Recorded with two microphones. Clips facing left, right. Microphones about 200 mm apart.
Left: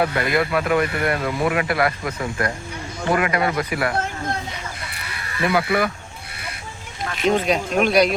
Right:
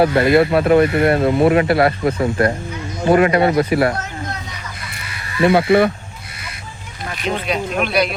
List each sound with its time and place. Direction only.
0.0 s speech: 30° right (ahead or behind)
5.4 s speech: 30° right (ahead or behind)
7.3 s speech: 40° left (ahead or behind)